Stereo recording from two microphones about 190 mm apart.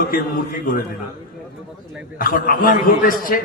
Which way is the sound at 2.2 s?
45° left (ahead or behind).